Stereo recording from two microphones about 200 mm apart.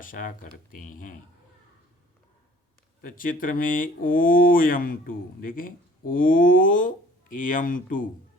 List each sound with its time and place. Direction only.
0.0 s speech: 40° left (ahead or behind)
3.0 s speech: 45° left (ahead or behind)